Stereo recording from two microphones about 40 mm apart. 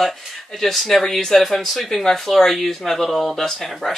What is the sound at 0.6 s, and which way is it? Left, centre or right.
Speech, centre.